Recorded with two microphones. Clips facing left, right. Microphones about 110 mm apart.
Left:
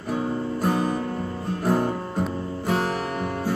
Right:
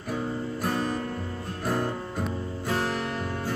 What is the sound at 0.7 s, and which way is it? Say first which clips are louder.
Music: left 5 dB; 15° left (ahead or behind).